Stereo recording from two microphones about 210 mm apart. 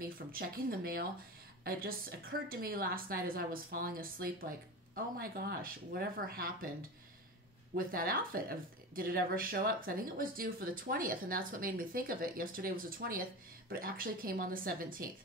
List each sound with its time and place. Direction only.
0.0 s speech: 45° right (ahead or behind)
7.7 s speech: 45° right (ahead or behind)